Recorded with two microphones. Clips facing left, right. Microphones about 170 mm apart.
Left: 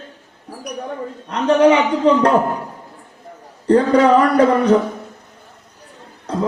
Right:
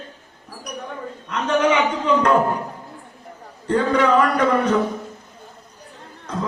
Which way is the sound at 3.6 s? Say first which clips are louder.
Left 6 dB; 35° left (ahead or behind).